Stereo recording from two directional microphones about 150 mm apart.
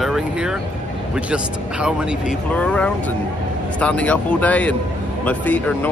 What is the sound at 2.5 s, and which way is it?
Speech, 10° left (ahead or behind).